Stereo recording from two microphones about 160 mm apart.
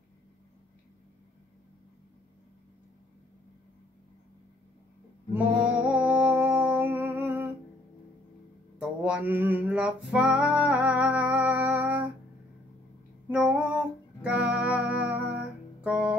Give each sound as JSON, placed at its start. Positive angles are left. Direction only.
{"t": 5.3, "sound": "music", "side_deg": -10}
{"t": 8.7, "sound": "music", "side_deg": -5}
{"t": 13.3, "sound": "music", "side_deg": -5}